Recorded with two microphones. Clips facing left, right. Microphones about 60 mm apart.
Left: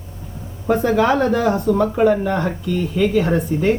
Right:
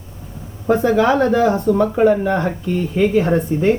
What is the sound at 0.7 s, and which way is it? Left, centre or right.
Speech, centre.